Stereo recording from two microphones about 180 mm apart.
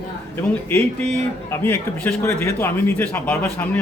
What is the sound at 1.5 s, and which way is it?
A man's voice, 15° left (ahead or behind).